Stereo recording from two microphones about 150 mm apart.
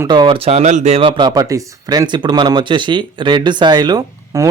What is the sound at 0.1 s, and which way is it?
Speech, 30° right (ahead or behind).